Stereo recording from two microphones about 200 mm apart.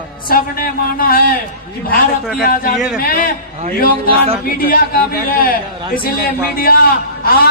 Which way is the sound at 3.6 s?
30° right (ahead or behind).